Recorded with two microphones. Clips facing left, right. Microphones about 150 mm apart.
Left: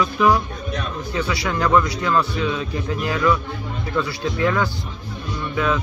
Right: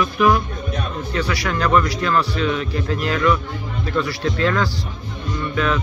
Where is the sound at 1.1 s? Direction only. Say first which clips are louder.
Even; 20° left (ahead or behind).